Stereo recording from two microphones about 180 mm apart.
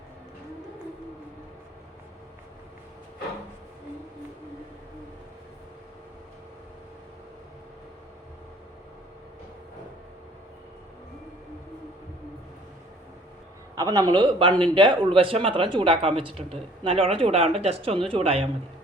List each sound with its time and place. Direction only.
13.7 s speech: 20° right (ahead or behind)